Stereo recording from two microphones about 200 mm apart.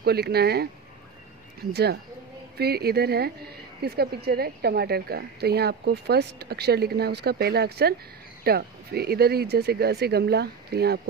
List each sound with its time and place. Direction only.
0.0 s a woman's voice: 50° right (ahead or behind)
1.7 s a woman's voice: 55° right (ahead or behind)